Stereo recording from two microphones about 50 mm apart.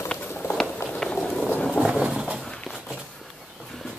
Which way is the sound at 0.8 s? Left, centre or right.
Centre.